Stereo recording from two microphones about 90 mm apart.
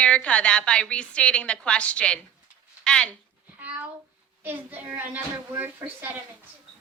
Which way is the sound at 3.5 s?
15° right (ahead or behind).